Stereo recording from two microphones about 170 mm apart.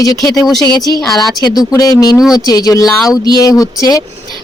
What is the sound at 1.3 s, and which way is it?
Speech, 25° left (ahead or behind).